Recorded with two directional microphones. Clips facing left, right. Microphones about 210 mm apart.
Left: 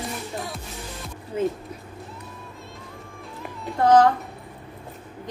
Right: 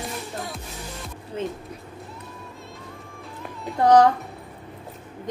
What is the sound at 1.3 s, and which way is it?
Speech, 10° left (ahead or behind).